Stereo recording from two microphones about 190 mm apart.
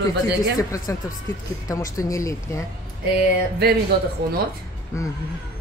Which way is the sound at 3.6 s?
60° right (ahead or behind).